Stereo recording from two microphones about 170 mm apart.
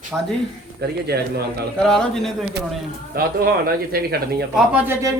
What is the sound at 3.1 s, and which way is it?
Speech, 60° right (ahead or behind).